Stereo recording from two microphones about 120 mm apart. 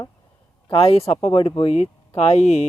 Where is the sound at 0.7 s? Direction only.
55° left (ahead or behind).